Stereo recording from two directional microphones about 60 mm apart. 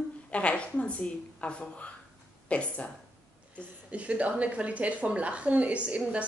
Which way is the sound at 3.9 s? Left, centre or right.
Right.